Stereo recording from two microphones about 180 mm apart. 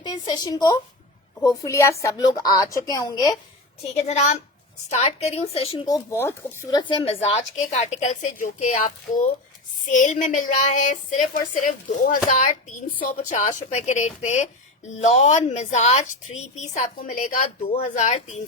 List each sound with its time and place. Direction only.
0.0 s a woman's voice: 25° left (ahead or behind)
4.1 s a woman's voice: 40° left (ahead or behind)